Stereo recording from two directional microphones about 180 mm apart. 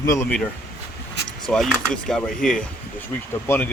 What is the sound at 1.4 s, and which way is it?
Speech, centre (ahead or behind).